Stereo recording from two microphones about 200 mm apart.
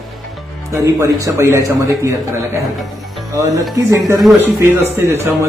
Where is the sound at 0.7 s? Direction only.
15° right (ahead or behind).